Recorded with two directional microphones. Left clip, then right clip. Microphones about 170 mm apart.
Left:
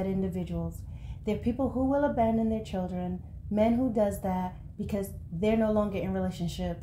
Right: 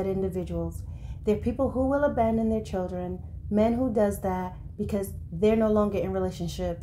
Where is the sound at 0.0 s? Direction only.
30° right (ahead or behind).